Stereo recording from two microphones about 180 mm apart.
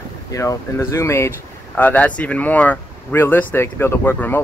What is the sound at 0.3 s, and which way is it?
Speech, 15° left (ahead or behind).